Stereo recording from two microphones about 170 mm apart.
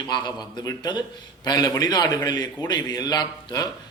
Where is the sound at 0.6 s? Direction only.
25° left (ahead or behind).